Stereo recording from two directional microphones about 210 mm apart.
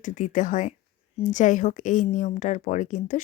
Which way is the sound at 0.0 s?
35° left (ahead or behind).